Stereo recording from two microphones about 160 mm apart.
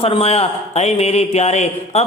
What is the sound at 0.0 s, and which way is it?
A woman's voice, 35° left (ahead or behind).